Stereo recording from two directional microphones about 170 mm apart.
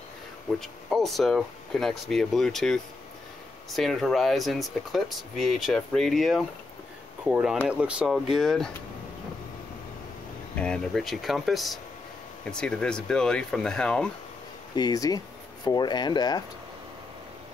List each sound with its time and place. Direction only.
0.6 s speech: centre (ahead or behind)
10.6 s speech: 5° left (ahead or behind)
14.8 s speech: 20° left (ahead or behind)